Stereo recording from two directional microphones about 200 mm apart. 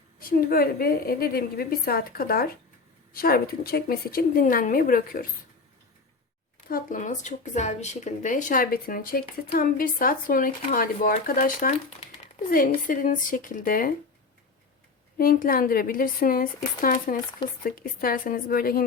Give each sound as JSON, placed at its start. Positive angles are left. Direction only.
{"t": 0.2, "sound": "speech", "side_deg": 45}
{"t": 6.7, "sound": "speech", "side_deg": 45}
{"t": 15.2, "sound": "speech", "side_deg": 45}